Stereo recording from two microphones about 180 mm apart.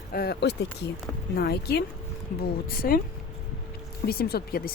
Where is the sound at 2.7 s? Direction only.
55° left (ahead or behind).